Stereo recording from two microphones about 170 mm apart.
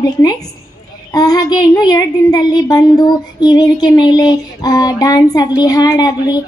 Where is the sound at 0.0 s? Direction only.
25° left (ahead or behind).